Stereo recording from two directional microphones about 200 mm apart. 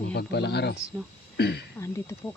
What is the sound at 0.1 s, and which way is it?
Speech, 55° left (ahead or behind).